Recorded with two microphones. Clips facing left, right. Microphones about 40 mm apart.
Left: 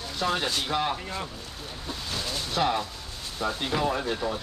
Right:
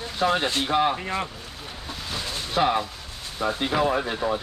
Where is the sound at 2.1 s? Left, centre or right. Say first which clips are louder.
Right 1 dB; centre.